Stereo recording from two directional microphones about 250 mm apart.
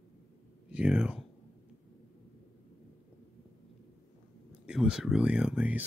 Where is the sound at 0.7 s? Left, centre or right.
Centre.